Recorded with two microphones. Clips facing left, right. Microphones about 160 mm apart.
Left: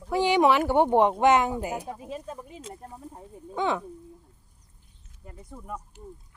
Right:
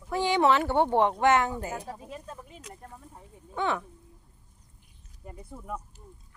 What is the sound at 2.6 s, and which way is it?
Speech, 25° left (ahead or behind).